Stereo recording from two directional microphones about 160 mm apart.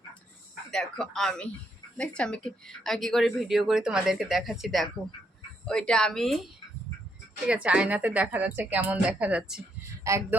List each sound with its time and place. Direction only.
0.7 s speech: 5° left (ahead or behind)
10.0 s speech: 20° right (ahead or behind)